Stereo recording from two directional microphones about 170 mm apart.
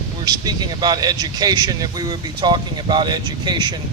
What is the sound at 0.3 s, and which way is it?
Speech, 25° right (ahead or behind).